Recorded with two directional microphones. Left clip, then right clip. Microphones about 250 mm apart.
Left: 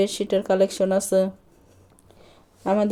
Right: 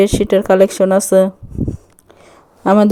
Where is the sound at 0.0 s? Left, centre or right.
Right.